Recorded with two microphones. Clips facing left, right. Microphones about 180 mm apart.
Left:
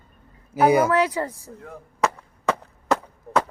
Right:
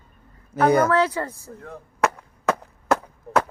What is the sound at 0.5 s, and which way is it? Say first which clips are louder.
Speech: even; 5° left (ahead or behind).